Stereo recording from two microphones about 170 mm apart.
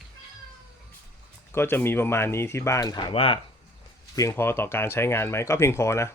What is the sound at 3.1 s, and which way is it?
Speech, 35° left (ahead or behind).